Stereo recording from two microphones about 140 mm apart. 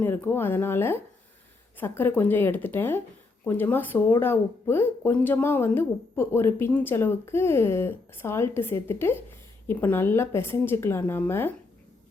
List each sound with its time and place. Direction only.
0.0 s speech: 15° left (ahead or behind)